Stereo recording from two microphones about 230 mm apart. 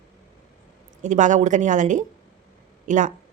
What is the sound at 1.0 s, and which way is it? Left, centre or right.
Speech, right.